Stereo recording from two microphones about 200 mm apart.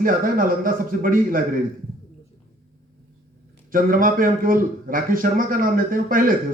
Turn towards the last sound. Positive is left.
turn(degrees=-45)  # may be behind; listen again after turning